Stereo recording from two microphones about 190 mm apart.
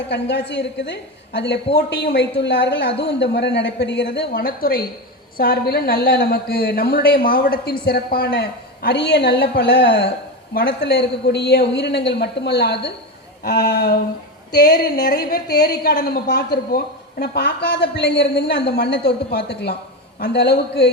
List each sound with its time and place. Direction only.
0.1 s a woman's voice: 65° left (ahead or behind)
4.3 s a woman's voice: 50° left (ahead or behind)
15.3 s a woman's voice: 55° left (ahead or behind)